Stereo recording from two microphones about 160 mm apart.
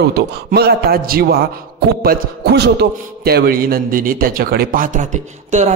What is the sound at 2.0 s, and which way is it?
A man's voice, 80° right.